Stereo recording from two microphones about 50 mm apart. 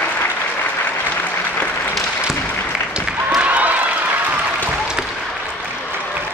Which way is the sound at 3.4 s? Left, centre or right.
Right.